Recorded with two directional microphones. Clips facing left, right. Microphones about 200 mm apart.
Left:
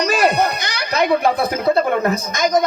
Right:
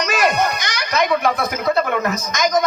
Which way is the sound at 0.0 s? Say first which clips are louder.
Left 2 dB; 35° left (ahead or behind).